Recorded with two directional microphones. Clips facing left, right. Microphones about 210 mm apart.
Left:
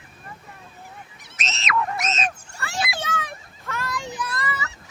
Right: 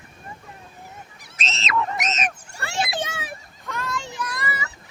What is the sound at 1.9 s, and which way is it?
Cat, 20° right (ahead or behind).